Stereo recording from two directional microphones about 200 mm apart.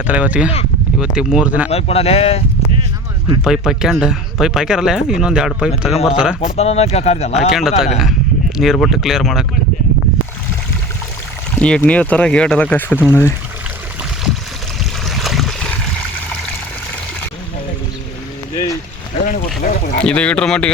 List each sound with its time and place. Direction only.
0.0 s speech: 5° right (ahead or behind)
1.7 s speech: 30° left (ahead or behind)
3.4 s speech: centre (ahead or behind)
6.6 s speech: 30° left (ahead or behind)
7.5 s speech: centre (ahead or behind)
11.5 s speech: 5° left (ahead or behind)
15.0 s boat: centre (ahead or behind)
18.5 s a sound: 15° left (ahead or behind)
19.6 s boat: 45° left (ahead or behind)
20.0 s speech: 5° left (ahead or behind)